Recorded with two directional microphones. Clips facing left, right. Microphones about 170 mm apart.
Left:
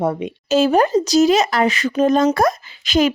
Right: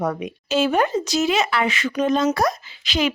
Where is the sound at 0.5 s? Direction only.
40° left (ahead or behind).